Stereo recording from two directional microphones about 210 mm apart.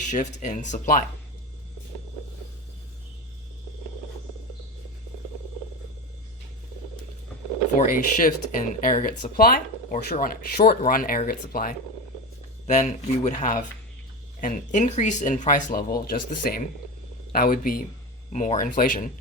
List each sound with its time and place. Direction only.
0.0 s speech: 35° left (ahead or behind)
7.8 s speech: 40° left (ahead or behind)